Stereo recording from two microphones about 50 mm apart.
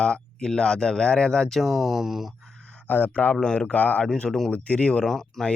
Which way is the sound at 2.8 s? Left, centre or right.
Left.